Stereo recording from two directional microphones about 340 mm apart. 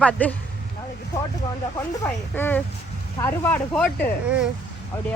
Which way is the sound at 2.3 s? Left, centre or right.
Centre.